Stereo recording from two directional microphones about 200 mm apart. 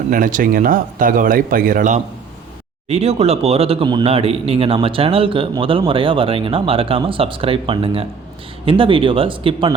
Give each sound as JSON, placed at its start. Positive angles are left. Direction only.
{"t": 0.1, "sound": "speech", "side_deg": -40}
{"t": 2.9, "sound": "speech", "side_deg": -30}